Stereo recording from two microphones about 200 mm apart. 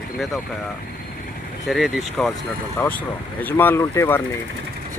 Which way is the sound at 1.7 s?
Centre (ahead or behind).